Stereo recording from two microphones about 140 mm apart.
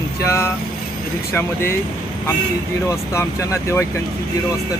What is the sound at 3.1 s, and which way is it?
Speech, 20° left (ahead or behind).